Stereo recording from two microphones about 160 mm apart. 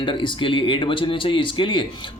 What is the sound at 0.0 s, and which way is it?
Speech, 30° left (ahead or behind).